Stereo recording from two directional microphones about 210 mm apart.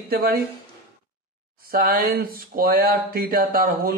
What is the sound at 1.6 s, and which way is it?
Speech, 45° right (ahead or behind).